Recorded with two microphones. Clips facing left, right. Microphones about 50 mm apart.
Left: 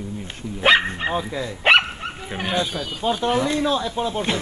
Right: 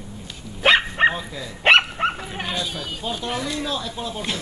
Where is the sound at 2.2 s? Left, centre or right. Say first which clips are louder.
Left 4 dB; centre.